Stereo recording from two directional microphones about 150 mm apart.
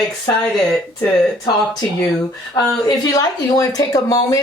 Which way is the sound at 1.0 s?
25° left (ahead or behind).